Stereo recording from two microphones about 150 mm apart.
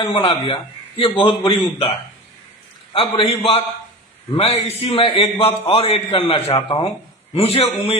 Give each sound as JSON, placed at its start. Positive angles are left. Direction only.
{"t": 0.0, "sound": "a man's voice", "side_deg": 35}
{"t": 2.9, "sound": "a man's voice", "side_deg": 40}